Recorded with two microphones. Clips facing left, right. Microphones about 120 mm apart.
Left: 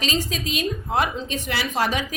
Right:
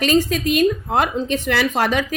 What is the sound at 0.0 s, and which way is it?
A woman's voice, 55° right (ahead or behind).